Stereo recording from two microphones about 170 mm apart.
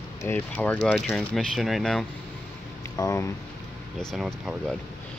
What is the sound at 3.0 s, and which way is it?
Speech, 15° left (ahead or behind).